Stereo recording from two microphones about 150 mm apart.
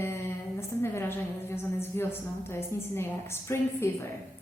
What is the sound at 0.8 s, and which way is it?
A woman's voice, 15° left (ahead or behind).